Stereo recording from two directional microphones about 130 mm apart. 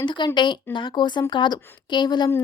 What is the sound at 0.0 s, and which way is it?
A woman's voice, 35° left (ahead or behind).